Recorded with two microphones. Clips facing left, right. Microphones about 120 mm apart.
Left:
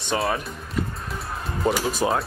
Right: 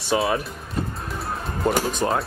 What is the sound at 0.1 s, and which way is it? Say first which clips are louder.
Speech: right 3 dB; centre (ahead or behind).